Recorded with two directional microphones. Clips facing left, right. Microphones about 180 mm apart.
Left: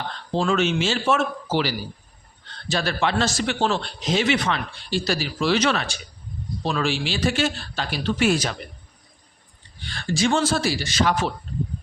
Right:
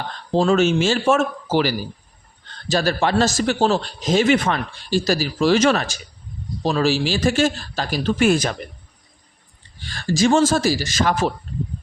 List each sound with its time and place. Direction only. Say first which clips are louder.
0.3 s a man's voice: right 5 dB; 40° right (ahead or behind)
9.8 s a man's voice: right 4 dB; 40° right (ahead or behind)